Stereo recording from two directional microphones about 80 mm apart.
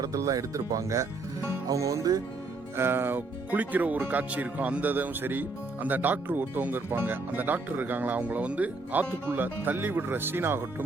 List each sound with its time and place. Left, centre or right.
0.0 s speech: right
2.7 s speech: right